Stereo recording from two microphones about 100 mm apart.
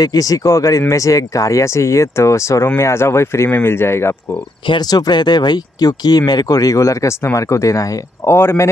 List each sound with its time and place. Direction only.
0.0 s speech: 35° left (ahead or behind)
4.6 s speech: 45° left (ahead or behind); by 8.6 s 25° left (ahead or behind)